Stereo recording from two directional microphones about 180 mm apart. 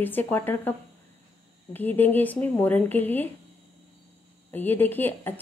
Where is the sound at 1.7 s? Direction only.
10° left (ahead or behind).